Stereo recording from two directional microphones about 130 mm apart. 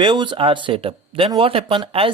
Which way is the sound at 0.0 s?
35° right (ahead or behind).